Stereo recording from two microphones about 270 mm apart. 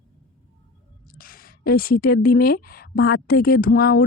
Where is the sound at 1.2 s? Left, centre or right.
Left.